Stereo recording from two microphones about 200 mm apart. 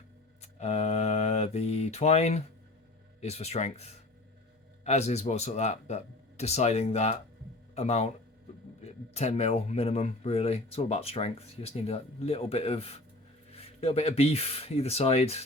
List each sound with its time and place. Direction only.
0.4 s mantra: 35° left (ahead or behind)
3.2 s speech: 30° left (ahead or behind)